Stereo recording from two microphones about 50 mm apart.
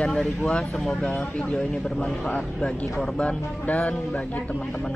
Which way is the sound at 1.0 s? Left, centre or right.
Left.